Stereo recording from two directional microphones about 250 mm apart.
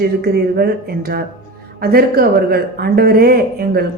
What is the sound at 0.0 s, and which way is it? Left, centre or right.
A woman's voice, right.